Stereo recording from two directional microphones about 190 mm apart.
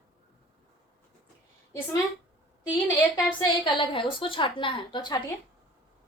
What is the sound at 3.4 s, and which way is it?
A woman's voice, 25° left (ahead or behind).